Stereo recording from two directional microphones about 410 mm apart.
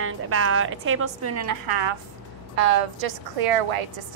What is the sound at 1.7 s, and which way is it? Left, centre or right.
Speech, right.